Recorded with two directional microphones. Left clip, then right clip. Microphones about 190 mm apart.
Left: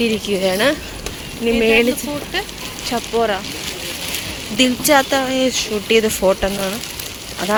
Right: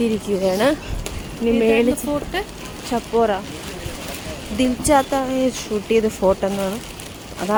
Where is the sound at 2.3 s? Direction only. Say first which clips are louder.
Left 2 dB; 55° right (ahead or behind).